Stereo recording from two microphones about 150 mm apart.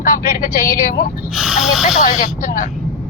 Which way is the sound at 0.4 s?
65° left (ahead or behind).